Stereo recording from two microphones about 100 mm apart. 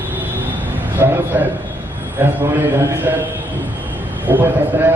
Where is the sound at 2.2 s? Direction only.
20° right (ahead or behind).